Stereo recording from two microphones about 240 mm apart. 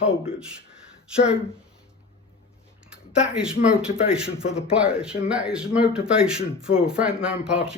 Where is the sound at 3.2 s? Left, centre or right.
Centre.